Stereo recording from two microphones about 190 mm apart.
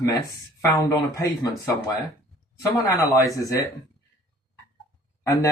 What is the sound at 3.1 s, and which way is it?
Speech, 15° left (ahead or behind).